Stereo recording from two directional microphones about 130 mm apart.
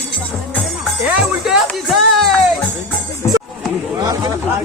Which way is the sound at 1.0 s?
5° right (ahead or behind).